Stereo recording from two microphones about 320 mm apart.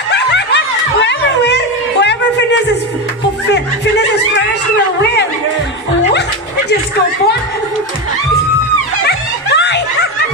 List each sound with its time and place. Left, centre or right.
0.1 s snicker: left
1.0 s a sound: left
9.0 s music: left